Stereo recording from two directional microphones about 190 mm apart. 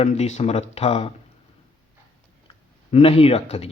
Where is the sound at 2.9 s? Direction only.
30° left (ahead or behind).